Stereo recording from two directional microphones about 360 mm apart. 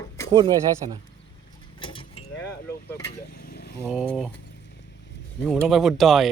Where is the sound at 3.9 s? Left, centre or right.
Centre.